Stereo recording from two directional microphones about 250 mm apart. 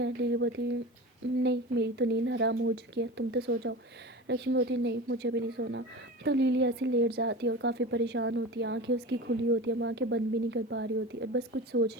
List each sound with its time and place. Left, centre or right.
0.0 s speech: right